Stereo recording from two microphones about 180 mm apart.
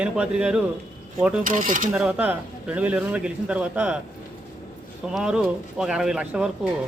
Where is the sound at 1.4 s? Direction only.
50° right (ahead or behind).